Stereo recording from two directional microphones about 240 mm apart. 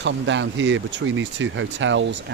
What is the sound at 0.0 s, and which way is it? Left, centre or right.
Speech, right.